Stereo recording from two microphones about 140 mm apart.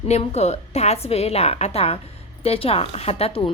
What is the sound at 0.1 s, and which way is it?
Speech, 50° left (ahead or behind).